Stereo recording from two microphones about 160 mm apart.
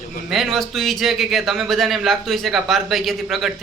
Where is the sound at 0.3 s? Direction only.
Centre (ahead or behind).